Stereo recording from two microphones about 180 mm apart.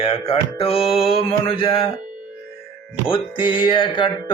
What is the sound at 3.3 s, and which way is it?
Music, 30° left (ahead or behind).